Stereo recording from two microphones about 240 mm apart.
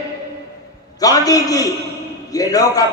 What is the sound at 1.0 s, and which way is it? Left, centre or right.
A man's voice, centre.